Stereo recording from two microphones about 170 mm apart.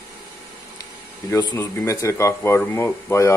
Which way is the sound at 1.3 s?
25° left (ahead or behind).